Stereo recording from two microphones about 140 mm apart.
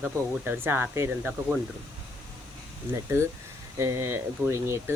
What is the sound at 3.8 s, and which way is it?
Speech, 20° right (ahead or behind).